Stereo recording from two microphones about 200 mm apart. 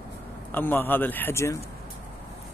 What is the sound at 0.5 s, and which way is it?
Speech, 10° left (ahead or behind).